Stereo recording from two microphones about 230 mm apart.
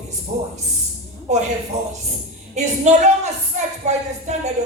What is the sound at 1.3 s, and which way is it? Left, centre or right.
Speech, right.